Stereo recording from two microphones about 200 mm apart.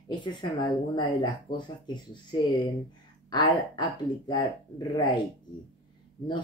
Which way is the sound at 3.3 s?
20° left (ahead or behind).